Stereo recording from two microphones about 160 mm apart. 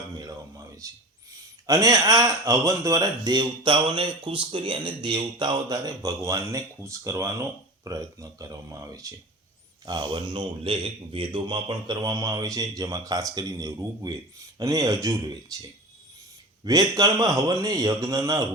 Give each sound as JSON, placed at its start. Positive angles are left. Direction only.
{"t": 0.8, "sound": "speech", "side_deg": -20}
{"t": 16.6, "sound": "speech", "side_deg": -25}